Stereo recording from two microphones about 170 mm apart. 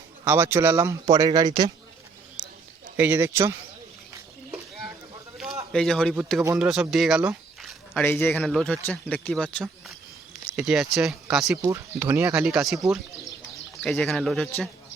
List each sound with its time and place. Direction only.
0.3 s speech: 15° right (ahead or behind)
3.0 s speech: 15° right (ahead or behind)
5.7 s speech: 5° left (ahead or behind)
8.0 s speech: 10° left (ahead or behind)
11.5 s speech: 15° right (ahead or behind); by 14.7 s 5° left (ahead or behind)